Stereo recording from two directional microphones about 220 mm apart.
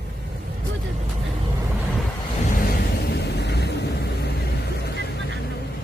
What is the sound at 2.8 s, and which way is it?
Vehicle, 50° left (ahead or behind).